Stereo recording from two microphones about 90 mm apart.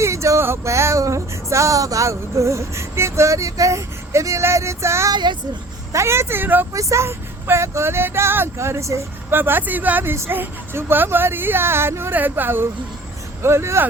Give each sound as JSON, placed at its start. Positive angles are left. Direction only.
{"t": 0.0, "sound": "a sound", "side_deg": -35}
{"t": 5.1, "sound": "speech", "side_deg": -55}
{"t": 5.9, "sound": "speech", "side_deg": -30}
{"t": 6.7, "sound": "speech", "side_deg": -35}